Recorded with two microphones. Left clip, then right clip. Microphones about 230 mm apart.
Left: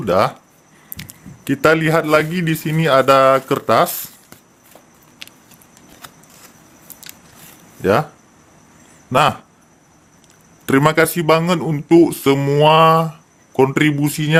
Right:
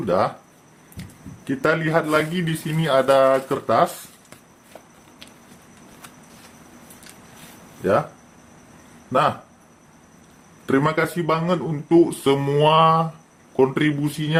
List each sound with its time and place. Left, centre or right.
0.0 s a man's voice: left
1.5 s a man's voice: left
5.2 s a sound: left
7.8 s speech: left
10.7 s a man's voice: left